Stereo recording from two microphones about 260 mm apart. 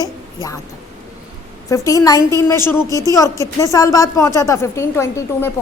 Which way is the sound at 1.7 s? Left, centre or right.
Centre.